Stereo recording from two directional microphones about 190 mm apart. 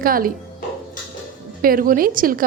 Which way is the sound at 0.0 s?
50° right (ahead or behind).